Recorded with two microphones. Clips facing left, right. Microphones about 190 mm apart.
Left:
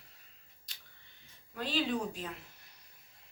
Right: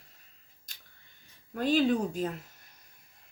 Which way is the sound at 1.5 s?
50° right (ahead or behind).